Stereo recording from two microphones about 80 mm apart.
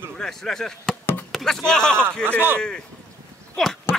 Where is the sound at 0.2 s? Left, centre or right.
Centre.